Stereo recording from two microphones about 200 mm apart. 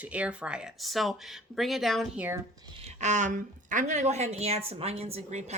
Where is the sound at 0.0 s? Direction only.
5° right (ahead or behind).